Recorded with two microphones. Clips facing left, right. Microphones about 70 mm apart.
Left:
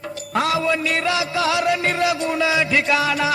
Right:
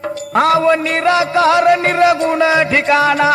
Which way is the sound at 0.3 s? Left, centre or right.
Right.